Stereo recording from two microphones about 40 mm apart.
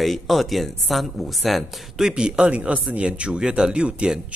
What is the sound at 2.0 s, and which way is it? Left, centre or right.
Speech, centre.